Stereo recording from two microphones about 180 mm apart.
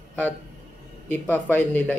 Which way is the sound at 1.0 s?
10° left (ahead or behind).